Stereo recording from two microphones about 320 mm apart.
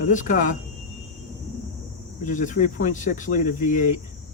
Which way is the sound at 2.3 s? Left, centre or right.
Left.